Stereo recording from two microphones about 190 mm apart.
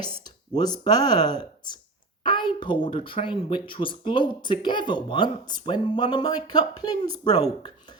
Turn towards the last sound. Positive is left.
turn(degrees=20)  # may be behind; listen again after turning